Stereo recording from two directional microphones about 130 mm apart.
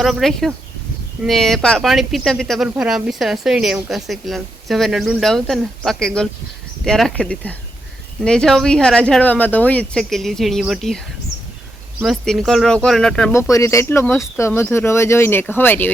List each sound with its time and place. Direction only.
0.0 s speech: centre (ahead or behind)
12.0 s speech: centre (ahead or behind)
13.3 s speech: 25° left (ahead or behind)